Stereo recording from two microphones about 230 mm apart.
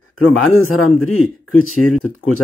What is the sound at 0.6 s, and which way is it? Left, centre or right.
Speech, left.